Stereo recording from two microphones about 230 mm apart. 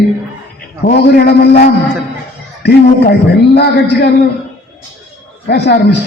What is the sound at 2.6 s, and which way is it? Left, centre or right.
A man's voice, left.